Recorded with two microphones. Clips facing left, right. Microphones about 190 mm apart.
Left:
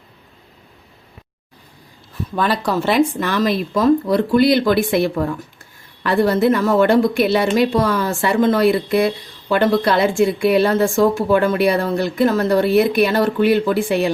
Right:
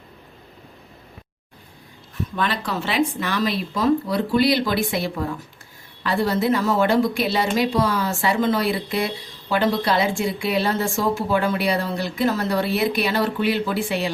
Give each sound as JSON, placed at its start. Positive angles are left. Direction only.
{"t": 2.3, "sound": "a woman's voice", "side_deg": 40}